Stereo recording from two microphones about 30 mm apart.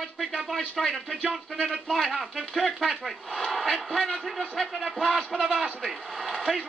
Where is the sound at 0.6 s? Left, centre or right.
Centre.